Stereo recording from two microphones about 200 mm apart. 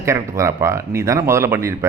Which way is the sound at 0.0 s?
15° right (ahead or behind).